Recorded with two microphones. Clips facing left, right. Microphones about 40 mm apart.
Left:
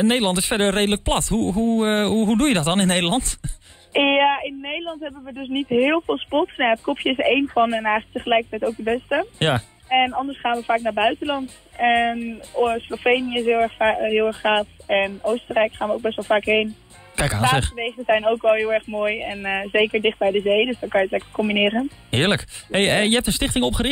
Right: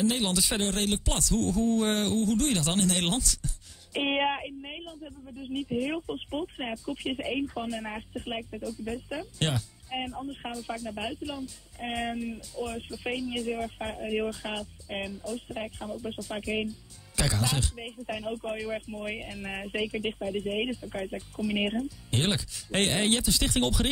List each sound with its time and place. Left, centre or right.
0.0 s speech: left
4.5 s speech: left